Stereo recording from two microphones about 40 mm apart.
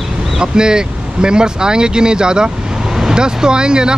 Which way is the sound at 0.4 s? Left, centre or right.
Centre.